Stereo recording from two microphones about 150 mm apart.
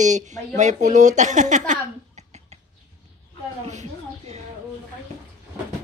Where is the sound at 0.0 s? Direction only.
55° right (ahead or behind).